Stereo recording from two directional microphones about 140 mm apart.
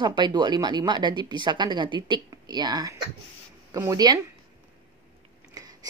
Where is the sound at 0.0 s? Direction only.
30° right (ahead or behind).